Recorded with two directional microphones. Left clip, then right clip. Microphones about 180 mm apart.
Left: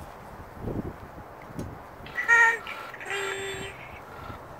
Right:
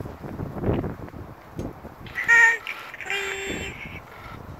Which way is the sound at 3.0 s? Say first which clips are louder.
Right 3 dB; 20° right (ahead or behind).